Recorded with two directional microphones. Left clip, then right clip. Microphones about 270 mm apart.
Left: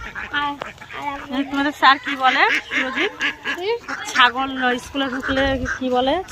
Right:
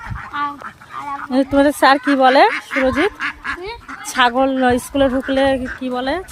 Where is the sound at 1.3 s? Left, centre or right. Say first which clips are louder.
Right 10 dB; centre.